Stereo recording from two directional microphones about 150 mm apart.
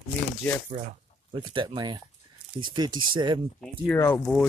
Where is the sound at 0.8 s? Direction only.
45° right (ahead or behind).